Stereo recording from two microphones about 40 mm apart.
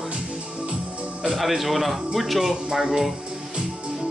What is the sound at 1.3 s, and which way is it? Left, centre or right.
Speech, centre.